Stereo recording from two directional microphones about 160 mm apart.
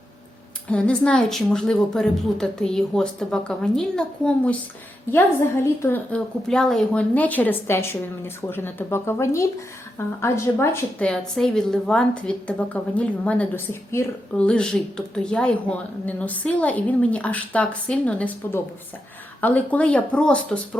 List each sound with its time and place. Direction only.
0.7 s a woman's voice: 10° left (ahead or behind)
5.8 s speech: 10° left (ahead or behind)